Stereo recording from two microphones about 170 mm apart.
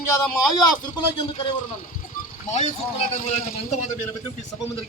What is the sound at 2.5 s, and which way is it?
A man's voice, 40° left (ahead or behind).